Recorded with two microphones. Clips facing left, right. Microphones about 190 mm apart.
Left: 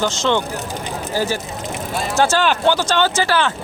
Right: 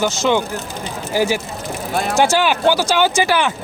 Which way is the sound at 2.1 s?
10° right (ahead or behind).